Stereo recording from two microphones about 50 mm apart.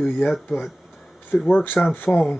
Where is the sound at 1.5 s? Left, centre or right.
Left.